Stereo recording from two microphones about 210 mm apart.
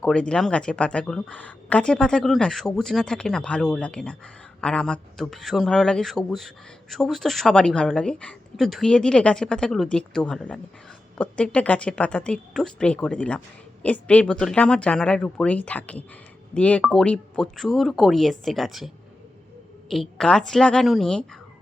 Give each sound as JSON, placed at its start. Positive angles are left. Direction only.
{"t": 0.0, "sound": "a woman's voice", "side_deg": 5}
{"t": 19.9, "sound": "a woman's voice", "side_deg": 0}